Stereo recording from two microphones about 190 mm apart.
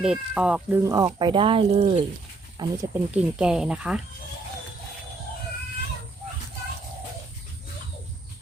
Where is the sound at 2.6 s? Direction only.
20° right (ahead or behind).